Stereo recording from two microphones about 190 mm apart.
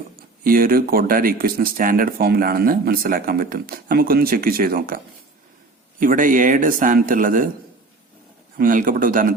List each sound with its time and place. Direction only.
0.4 s speech: 50° right (ahead or behind)
6.0 s speech: 45° right (ahead or behind)
8.5 s speech: 45° right (ahead or behind)